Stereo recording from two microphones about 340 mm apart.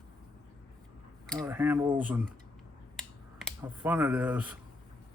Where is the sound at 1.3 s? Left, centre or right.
Centre.